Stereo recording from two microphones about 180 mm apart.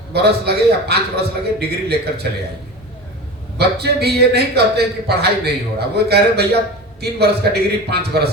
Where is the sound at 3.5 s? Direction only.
65° right (ahead or behind).